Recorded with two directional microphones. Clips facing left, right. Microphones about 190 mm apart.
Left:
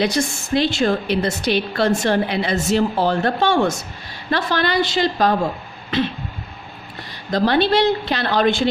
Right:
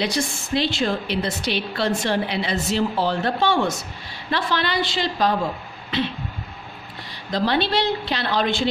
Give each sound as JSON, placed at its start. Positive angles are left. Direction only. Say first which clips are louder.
{"t": 0.0, "sound": "a woman's voice", "louder": "left 4 dB", "side_deg": 45}
{"t": 7.2, "sound": "a woman's voice", "louder": "left 5 dB", "side_deg": 50}